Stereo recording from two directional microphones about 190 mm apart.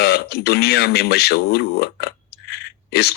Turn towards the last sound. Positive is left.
turn(degrees=60)  # may be behind; listen again after turning